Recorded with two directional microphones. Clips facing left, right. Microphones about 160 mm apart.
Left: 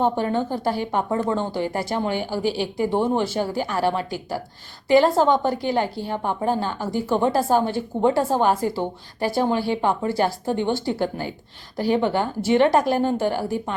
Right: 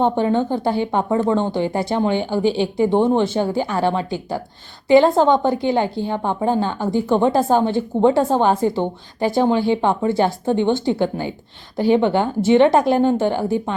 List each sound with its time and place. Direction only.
0.0 s a woman's voice: 25° right (ahead or behind)